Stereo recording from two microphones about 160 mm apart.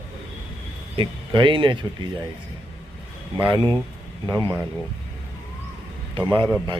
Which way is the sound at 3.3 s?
30° right (ahead or behind).